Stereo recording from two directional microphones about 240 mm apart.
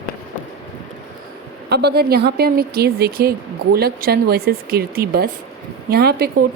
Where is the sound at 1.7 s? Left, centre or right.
Right.